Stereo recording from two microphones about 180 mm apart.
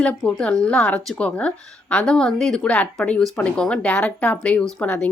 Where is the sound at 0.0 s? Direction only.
5° left (ahead or behind).